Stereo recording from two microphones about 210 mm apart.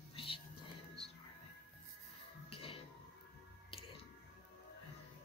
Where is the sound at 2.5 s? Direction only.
25° left (ahead or behind).